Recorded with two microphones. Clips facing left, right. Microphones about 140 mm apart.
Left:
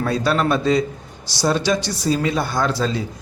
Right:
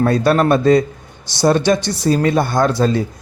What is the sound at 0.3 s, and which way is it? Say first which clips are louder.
Speech: right 5 dB; 50° right (ahead or behind).